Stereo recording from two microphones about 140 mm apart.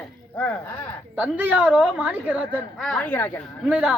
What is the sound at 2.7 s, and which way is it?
Speech, centre (ahead or behind).